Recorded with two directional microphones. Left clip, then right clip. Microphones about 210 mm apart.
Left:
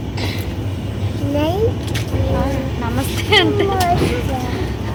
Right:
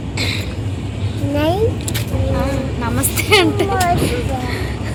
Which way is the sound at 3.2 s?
20° right (ahead or behind).